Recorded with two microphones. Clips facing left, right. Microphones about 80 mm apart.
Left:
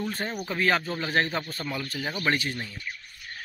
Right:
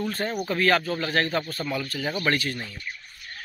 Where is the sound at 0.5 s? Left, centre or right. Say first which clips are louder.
Right 3 dB; centre.